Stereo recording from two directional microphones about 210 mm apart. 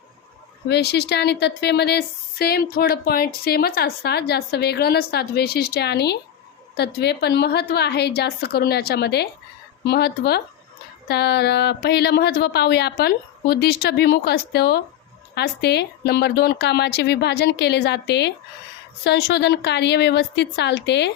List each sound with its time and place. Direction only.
0.7 s a woman's voice: 50° left (ahead or behind)